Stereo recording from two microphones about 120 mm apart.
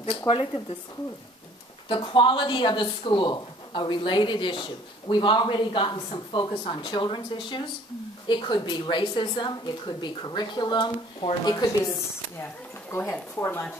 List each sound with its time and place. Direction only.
0.3 s speech: 50° left (ahead or behind)
1.9 s speech: 45° left (ahead or behind)
12.9 s speech: 25° left (ahead or behind)